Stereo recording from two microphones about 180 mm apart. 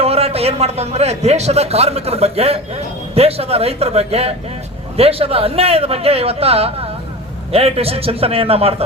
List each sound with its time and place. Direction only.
0.0 s a man's voice: 35° right (ahead or behind)